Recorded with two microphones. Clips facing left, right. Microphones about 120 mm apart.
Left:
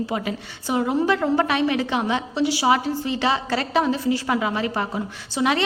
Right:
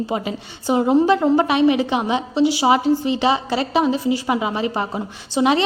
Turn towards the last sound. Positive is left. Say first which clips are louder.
# right 4 dB
turn(degrees=-20)  # may be behind; listen again after turning